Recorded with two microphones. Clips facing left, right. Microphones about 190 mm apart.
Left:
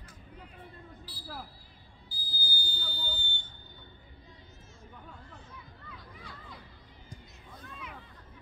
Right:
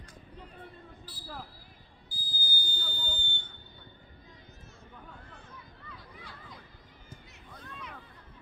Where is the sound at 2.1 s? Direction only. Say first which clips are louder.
Even; 50° right (ahead or behind).